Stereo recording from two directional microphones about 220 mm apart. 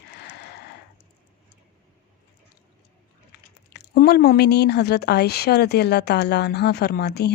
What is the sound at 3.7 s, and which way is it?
Speech, 45° left (ahead or behind).